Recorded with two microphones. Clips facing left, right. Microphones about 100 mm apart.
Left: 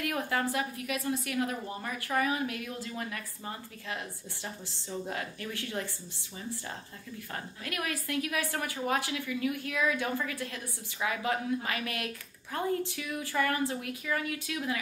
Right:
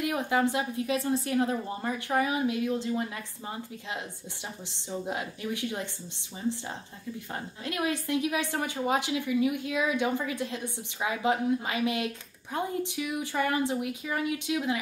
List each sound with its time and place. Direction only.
0.0 s speech: 20° right (ahead or behind)
7.3 s speech: 25° right (ahead or behind)